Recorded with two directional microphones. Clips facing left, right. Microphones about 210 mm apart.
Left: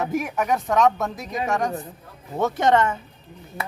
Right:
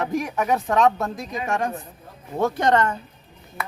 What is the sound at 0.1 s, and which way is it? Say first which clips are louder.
A woman's voice: right 1 dB; 5° left (ahead or behind).